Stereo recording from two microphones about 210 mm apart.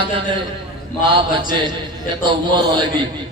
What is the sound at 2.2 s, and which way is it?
Speech, 20° right (ahead or behind).